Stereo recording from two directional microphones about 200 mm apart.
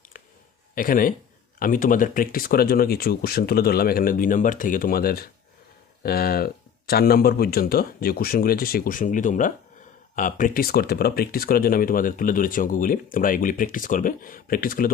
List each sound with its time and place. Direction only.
0.8 s speech: 45° left (ahead or behind)